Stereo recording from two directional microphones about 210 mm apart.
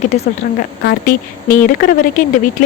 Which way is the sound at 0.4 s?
45° left (ahead or behind).